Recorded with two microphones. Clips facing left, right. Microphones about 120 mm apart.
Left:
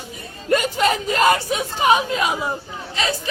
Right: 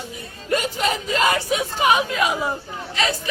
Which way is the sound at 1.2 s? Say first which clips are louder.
Left 2 dB; 40° left (ahead or behind).